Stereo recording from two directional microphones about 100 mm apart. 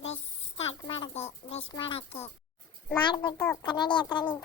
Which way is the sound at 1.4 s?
60° left (ahead or behind).